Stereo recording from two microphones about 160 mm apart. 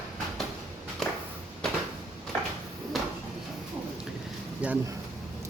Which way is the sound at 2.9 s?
Centre (ahead or behind).